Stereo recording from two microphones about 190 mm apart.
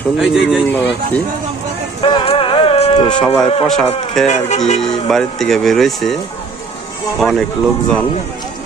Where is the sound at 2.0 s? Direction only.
30° left (ahead or behind).